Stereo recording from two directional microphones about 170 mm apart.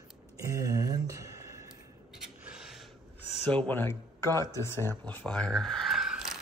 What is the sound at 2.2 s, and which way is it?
Rub, 5° right (ahead or behind).